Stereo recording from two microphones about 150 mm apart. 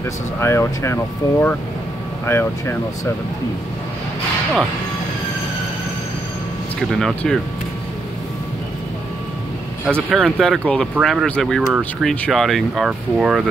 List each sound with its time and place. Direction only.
0.4 s speech: 20° left (ahead or behind)
6.9 s speech: centre (ahead or behind)
9.8 s speech: 15° right (ahead or behind)
10.1 s speech: centre (ahead or behind)